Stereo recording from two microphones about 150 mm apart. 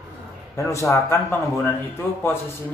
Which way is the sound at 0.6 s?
20° left (ahead or behind).